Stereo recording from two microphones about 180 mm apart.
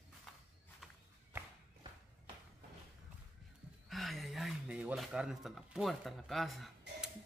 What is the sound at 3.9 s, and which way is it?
Speech, centre (ahead or behind).